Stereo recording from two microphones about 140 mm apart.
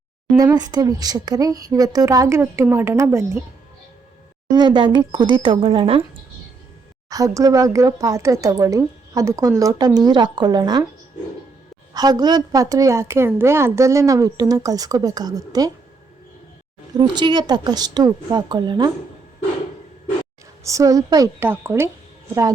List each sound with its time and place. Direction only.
0.5 s speech: 30° right (ahead or behind)
4.5 s a woman's voice: 35° right (ahead or behind)
7.1 s speech: 25° right (ahead or behind)
11.9 s speech: 30° right (ahead or behind)
17.0 s a woman's voice: 30° right (ahead or behind)
20.7 s speech: 25° right (ahead or behind)